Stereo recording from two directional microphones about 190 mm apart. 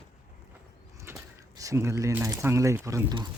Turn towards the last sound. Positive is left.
turn(degrees=-20)  # may be behind; listen again after turning